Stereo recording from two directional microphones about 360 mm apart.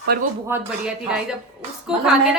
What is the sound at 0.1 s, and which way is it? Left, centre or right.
Speech, right.